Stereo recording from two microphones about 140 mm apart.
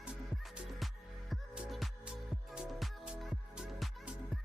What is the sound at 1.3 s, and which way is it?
Music, centre (ahead or behind).